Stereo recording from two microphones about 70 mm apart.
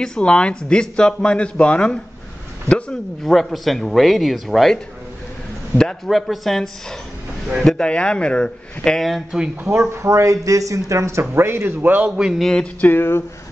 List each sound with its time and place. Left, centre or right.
0.0 s speech: centre
6.0 s speech: centre
9.8 s speech: right
12.2 s speech: centre
12.8 s speech: left